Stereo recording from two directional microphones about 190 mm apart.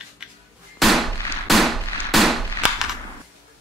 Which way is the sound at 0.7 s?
Centre (ahead or behind).